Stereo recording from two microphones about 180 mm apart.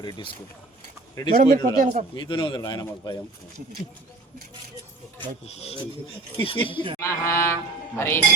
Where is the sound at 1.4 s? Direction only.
45° right (ahead or behind).